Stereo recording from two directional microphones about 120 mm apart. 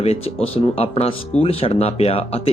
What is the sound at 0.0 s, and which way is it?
Speech, 60° left (ahead or behind).